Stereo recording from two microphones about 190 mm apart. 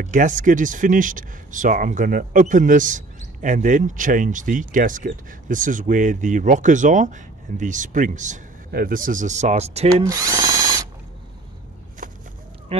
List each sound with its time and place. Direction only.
0.0 s speech: 45° right (ahead or behind)
10.0 s drill: 20° right (ahead or behind)
12.0 s fowl: 45° right (ahead or behind)